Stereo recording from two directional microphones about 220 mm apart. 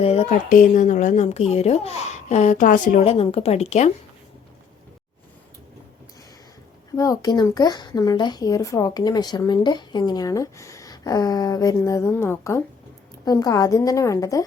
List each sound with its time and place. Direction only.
0.0 s a woman's voice: 25° left (ahead or behind)
6.9 s speech: 15° left (ahead or behind)